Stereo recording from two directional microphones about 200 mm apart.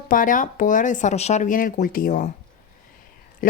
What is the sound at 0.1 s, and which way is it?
Speech, 40° left (ahead or behind).